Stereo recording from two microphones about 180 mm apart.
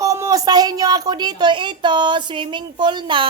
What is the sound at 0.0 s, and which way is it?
A woman's voice, 20° right (ahead or behind).